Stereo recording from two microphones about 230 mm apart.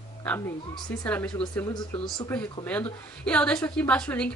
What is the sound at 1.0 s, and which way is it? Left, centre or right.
A woman's voice, centre.